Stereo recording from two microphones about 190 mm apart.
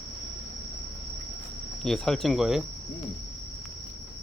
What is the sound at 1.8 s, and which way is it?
Speech, centre (ahead or behind).